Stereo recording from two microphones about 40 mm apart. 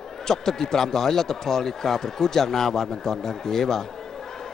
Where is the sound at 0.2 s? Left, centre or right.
Centre.